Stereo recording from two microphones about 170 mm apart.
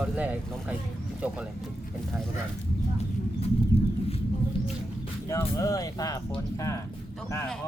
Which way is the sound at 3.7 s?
70° left (ahead or behind).